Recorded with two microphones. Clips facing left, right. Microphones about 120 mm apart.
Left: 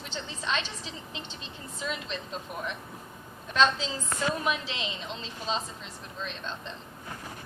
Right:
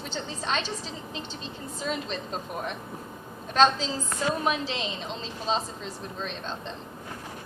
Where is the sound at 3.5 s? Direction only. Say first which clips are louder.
Right 3 dB; 35° right (ahead or behind).